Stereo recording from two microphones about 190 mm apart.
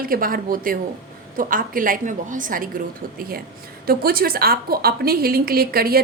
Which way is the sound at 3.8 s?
50° right (ahead or behind).